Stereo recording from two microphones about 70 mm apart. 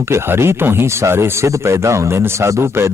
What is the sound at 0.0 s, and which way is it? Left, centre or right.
Speech, right.